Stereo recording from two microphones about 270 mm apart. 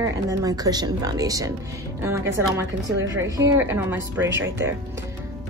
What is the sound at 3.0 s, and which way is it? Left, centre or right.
A woman's voice, centre.